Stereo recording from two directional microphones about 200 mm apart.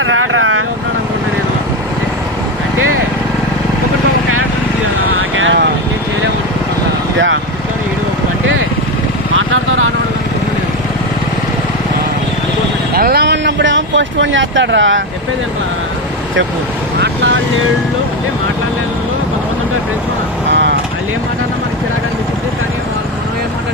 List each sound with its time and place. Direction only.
0.0 s vehicle: 80° right
5.4 s vehicle: 70° right (ahead or behind)
12.9 s a sound: 50° right (ahead or behind); by 15.0 s 70° right (ahead or behind)
17.0 s vehicle: 65° right (ahead or behind)
20.5 s vehicle: 60° right (ahead or behind)